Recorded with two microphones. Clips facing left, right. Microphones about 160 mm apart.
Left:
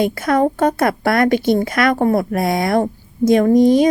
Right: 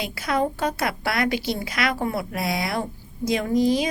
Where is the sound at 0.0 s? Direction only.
50° left (ahead or behind).